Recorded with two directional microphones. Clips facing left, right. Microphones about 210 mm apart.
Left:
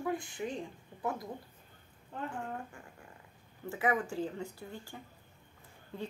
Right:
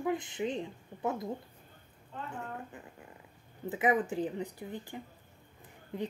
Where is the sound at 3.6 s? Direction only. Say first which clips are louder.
Right 3 dB; 20° right (ahead or behind).